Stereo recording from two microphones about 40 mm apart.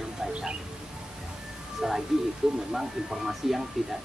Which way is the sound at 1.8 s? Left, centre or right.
Centre.